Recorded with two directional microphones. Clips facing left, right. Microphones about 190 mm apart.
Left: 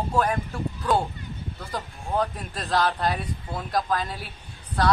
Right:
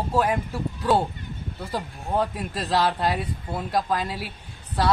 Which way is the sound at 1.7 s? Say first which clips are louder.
Right 2 dB; 5° right (ahead or behind).